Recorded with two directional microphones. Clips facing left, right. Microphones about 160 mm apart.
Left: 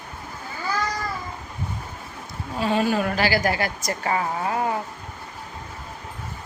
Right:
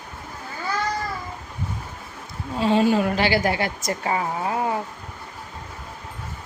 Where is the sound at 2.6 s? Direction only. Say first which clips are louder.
Right 3 dB; 25° right (ahead or behind).